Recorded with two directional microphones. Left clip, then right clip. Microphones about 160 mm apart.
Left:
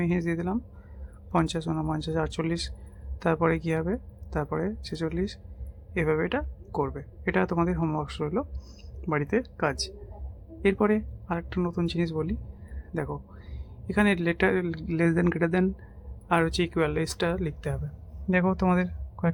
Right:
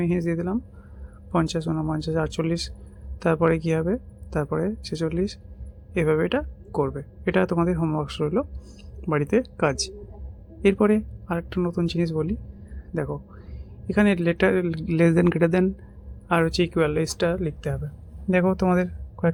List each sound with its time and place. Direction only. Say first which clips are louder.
0.0 s speech: right 3 dB; centre (ahead or behind)